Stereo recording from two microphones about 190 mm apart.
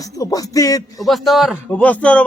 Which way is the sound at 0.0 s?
20° left (ahead or behind).